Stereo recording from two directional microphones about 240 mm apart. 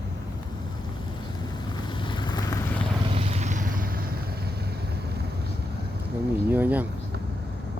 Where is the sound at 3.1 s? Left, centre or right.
Right.